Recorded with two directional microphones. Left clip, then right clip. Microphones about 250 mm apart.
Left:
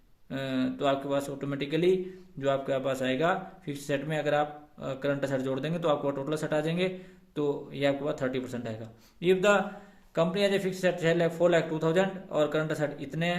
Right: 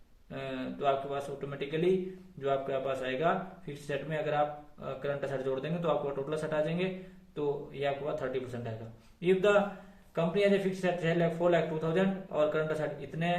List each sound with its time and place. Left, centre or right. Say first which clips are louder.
0.3 s speech: left 6 dB; left